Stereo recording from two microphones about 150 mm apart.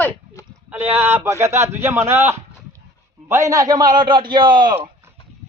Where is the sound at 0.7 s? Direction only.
15° right (ahead or behind); by 4.7 s 30° right (ahead or behind).